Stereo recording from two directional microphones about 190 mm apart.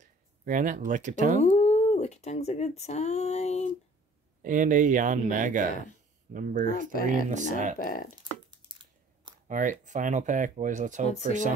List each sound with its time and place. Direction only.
0.0 s speech: 45° right (ahead or behind)
1.4 s speech: 35° left (ahead or behind)
4.4 s speech: 45° right (ahead or behind)
6.7 s speech: 50° left (ahead or behind)
7.2 s speech: 40° right (ahead or behind)
7.8 s speech: 45° left (ahead or behind)
8.2 s a sound: 25° right (ahead or behind)
9.5 s speech: 45° right (ahead or behind)